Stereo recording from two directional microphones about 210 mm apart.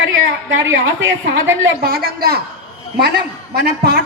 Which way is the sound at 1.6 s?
45° right (ahead or behind).